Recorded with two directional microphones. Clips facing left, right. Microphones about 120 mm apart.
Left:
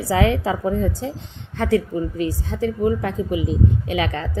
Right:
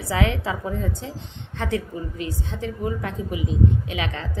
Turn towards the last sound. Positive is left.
turn(degrees=40)  # may be behind; listen again after turning